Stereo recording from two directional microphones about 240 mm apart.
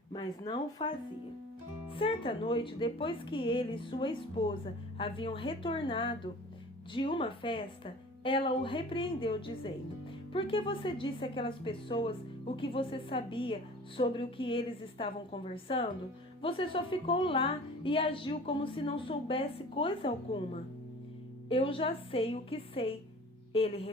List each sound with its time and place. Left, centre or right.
0.1 s speech: centre
1.9 s a woman's voice: left